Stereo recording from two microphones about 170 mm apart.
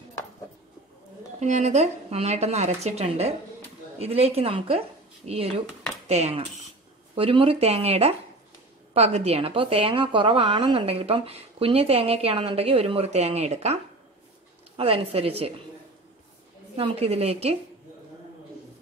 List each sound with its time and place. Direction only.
1.4 s a woman's voice: 40° right (ahead or behind)
14.8 s a woman's voice: 35° right (ahead or behind)
16.7 s a woman's voice: 35° right (ahead or behind)